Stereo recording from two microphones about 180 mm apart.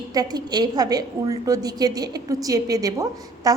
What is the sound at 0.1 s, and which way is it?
A woman's voice, 20° right (ahead or behind).